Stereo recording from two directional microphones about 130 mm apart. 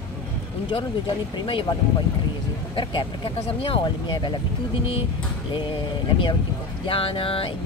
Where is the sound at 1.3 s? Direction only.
40° left (ahead or behind).